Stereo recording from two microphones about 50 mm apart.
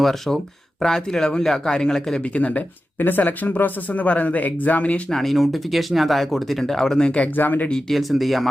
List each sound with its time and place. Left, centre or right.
0.0 s speech: centre
2.2 s speech: left
3.0 s speech: left
5.0 s speech: centre; by 7.3 s left
7.3 s speech: left
7.9 s speech: centre